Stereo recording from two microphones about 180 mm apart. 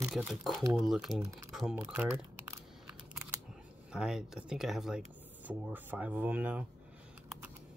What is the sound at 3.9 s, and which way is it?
Speech, centre (ahead or behind).